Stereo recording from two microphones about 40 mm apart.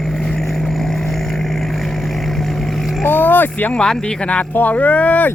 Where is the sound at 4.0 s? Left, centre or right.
Left.